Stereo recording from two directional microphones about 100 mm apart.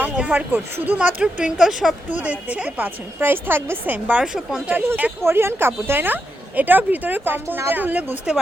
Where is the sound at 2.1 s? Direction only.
15° right (ahead or behind).